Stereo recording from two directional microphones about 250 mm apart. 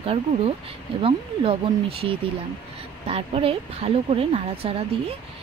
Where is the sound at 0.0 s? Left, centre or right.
Right.